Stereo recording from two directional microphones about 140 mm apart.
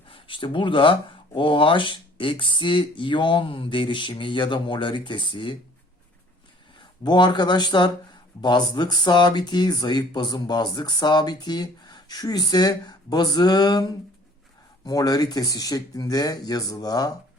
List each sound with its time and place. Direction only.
0.1 s speech: 35° left (ahead or behind)
6.7 s speech: 35° left (ahead or behind)
14.8 s speech: 25° left (ahead or behind)